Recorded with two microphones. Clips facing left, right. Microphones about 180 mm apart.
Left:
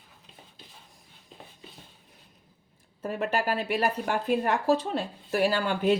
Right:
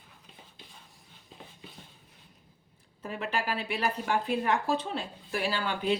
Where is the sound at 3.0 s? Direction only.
45° left (ahead or behind).